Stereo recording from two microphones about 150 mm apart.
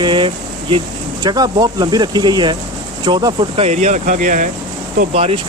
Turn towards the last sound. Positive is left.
turn(degrees=-40)  # may be behind; listen again after turning